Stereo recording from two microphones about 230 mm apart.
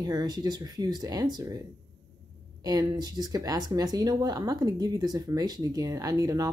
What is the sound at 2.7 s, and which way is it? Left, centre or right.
A woman's voice, centre.